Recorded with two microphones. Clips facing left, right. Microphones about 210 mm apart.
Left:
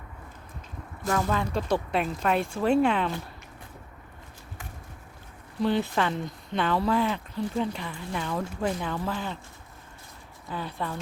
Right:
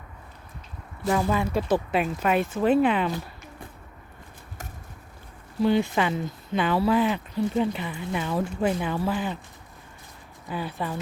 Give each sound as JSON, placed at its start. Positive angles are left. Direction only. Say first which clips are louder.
{"t": 1.0, "sound": "speech", "louder": "right 3 dB", "side_deg": -10}
{"t": 5.5, "sound": "speech", "louder": "right 3 dB", "side_deg": -5}
{"t": 10.5, "sound": "speech", "louder": "right 3 dB", "side_deg": -10}